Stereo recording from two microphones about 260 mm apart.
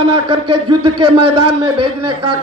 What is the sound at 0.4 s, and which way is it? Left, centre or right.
A man's voice, right.